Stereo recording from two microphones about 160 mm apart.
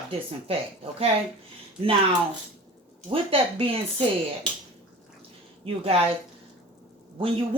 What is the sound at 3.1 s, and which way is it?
Speech, 35° right (ahead or behind).